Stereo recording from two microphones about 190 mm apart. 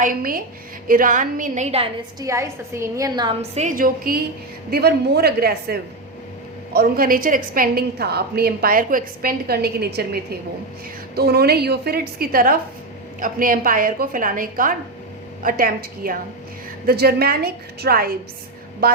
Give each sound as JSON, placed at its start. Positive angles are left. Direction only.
{"t": 0.0, "sound": "a woman's voice", "side_deg": -50}
{"t": 2.2, "sound": "a woman's voice", "side_deg": -15}
{"t": 3.5, "sound": "a woman's voice", "side_deg": -40}